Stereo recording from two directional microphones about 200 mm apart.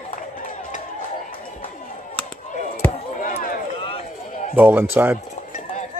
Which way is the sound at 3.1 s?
45° left (ahead or behind).